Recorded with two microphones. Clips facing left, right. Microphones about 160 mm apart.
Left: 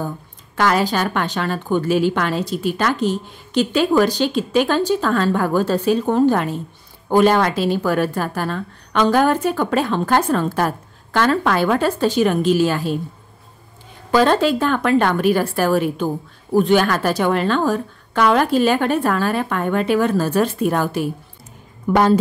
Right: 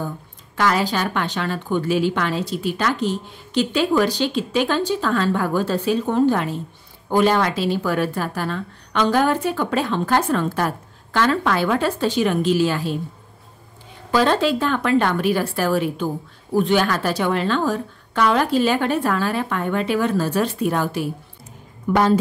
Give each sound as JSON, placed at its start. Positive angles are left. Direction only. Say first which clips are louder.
{"t": 0.6, "sound": "a woman's voice", "louder": "left 2 dB", "side_deg": 45}
{"t": 14.1, "sound": "a woman's voice", "louder": "left 3 dB", "side_deg": 45}
{"t": 21.9, "sound": "a woman's voice", "louder": "left 2 dB", "side_deg": 35}